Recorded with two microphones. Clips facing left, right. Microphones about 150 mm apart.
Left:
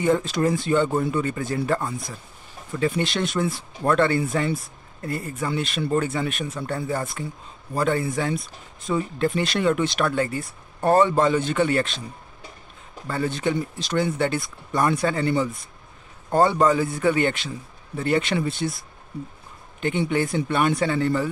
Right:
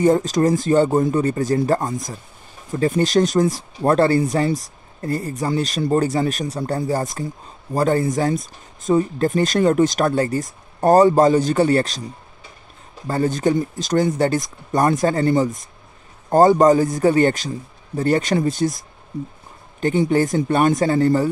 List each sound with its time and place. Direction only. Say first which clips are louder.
0.0 s speech: right 5 dB; 40° right (ahead or behind)
13.0 s speech: right 6 dB; 40° right (ahead or behind)
19.8 s speech: right 6 dB; 40° right (ahead or behind)